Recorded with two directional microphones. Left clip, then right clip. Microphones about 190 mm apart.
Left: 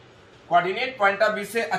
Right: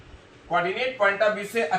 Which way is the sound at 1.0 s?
10° right (ahead or behind).